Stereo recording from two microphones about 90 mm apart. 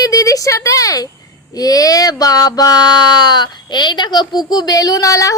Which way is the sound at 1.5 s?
40° left (ahead or behind).